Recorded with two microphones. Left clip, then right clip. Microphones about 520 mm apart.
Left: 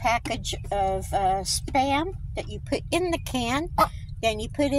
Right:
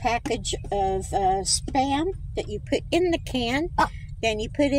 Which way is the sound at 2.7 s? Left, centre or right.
Left.